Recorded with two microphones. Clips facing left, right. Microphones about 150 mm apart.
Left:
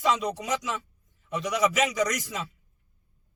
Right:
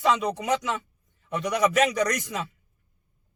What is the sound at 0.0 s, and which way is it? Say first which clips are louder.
A man's voice: right 2 dB; 55° right (ahead or behind).